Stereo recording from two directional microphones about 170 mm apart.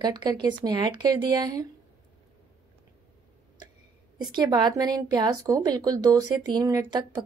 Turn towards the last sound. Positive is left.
turn(degrees=-25)  # may be behind; listen again after turning